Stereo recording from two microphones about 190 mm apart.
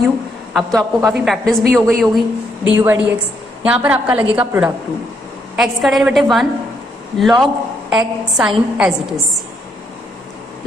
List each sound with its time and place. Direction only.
0.5 s a woman's voice: centre (ahead or behind)